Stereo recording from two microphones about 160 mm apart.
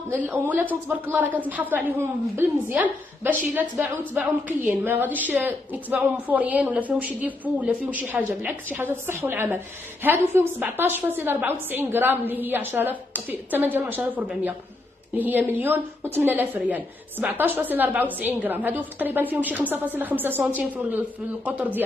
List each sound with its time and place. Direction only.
0.3 s a woman's voice: 10° right (ahead or behind)